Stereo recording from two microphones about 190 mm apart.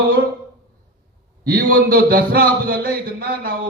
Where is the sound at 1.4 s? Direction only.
50° right (ahead or behind).